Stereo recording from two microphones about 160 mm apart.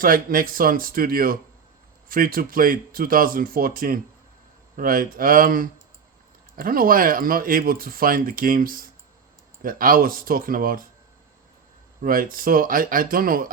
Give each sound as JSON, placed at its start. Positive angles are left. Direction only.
{"t": 0.0, "sound": "speech", "side_deg": -60}
{"t": 12.0, "sound": "speech", "side_deg": -60}